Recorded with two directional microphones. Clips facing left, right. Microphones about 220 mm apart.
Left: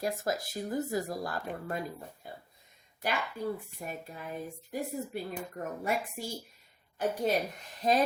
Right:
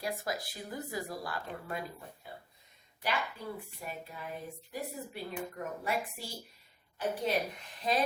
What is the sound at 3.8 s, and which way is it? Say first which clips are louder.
Speech: left 2 dB; 40° left (ahead or behind).